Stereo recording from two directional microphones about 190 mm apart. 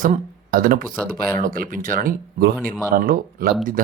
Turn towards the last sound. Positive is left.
turn(degrees=-50)  # may be behind; listen again after turning